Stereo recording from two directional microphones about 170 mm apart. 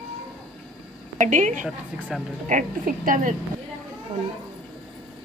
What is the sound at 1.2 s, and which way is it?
A woman's voice, 45° right (ahead or behind).